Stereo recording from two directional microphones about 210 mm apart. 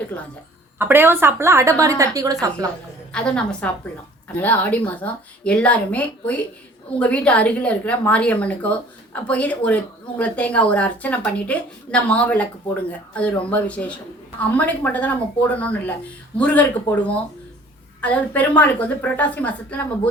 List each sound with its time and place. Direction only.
0.8 s a woman's voice: 10° right (ahead or behind)
3.1 s a woman's voice: 5° left (ahead or behind)